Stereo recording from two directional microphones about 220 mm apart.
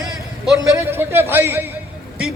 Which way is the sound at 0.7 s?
10° right (ahead or behind).